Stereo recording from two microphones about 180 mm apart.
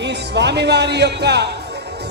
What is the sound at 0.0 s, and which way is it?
A man's voice, 70° right (ahead or behind).